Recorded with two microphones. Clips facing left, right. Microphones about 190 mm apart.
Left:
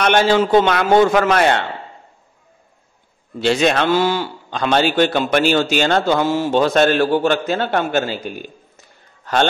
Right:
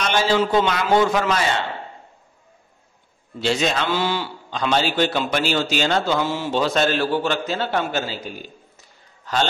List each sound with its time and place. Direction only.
0.0 s a man's voice: 60° left (ahead or behind)
3.3 s a man's voice: 60° left (ahead or behind)